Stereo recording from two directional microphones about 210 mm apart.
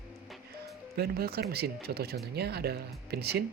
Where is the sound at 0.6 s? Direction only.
50° right (ahead or behind).